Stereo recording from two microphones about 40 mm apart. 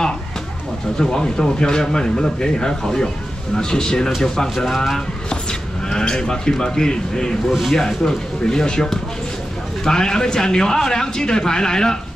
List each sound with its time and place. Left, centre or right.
0.9 s speech: centre
4.6 s speech: centre
5.3 s speech: centre
7.4 s speech: centre
7.7 s speech: centre